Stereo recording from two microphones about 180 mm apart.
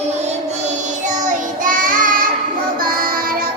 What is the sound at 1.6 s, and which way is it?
Child singing, 50° right (ahead or behind).